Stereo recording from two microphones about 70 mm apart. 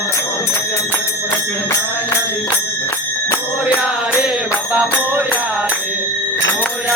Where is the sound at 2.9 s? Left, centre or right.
Left.